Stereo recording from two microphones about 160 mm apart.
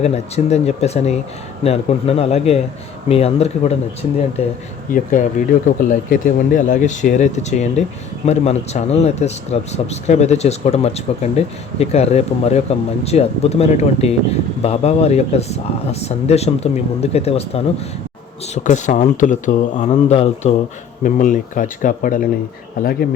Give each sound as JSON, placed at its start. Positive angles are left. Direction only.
{"t": 0.0, "sound": "speech", "side_deg": 40}
{"t": 4.9, "sound": "speech", "side_deg": 55}
{"t": 18.5, "sound": "speech", "side_deg": 50}
{"t": 19.7, "sound": "speech", "side_deg": 35}
{"t": 21.0, "sound": "speech", "side_deg": 55}